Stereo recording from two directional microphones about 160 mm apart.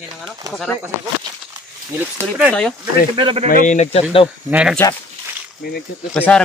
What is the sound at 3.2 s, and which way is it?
Speech, 30° right (ahead or behind).